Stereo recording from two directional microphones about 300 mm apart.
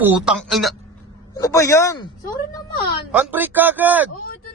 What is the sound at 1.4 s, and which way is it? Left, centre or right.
Speech, centre.